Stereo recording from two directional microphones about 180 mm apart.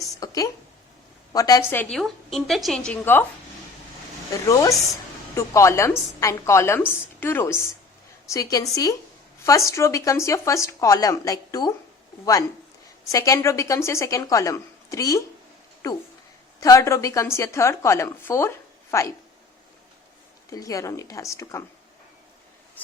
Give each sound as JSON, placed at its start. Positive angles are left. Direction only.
{"t": 0.2, "sound": "a woman's voice", "side_deg": 20}
{"t": 5.3, "sound": "a woman's voice", "side_deg": 15}
{"t": 16.6, "sound": "a woman's voice", "side_deg": 20}
{"t": 20.5, "sound": "a woman's voice", "side_deg": 20}